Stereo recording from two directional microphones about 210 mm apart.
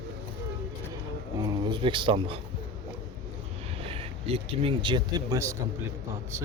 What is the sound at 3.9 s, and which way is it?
Speech, 25° right (ahead or behind).